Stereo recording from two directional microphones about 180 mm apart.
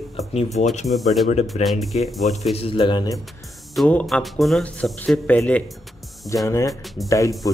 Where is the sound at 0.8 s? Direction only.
Centre (ahead or behind).